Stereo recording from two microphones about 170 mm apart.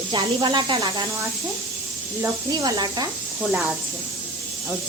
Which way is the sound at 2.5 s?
25° right (ahead or behind).